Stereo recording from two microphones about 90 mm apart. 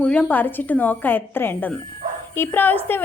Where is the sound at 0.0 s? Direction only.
15° left (ahead or behind).